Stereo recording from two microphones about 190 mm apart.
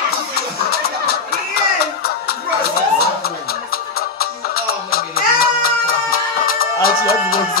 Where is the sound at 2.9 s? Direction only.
55° left (ahead or behind).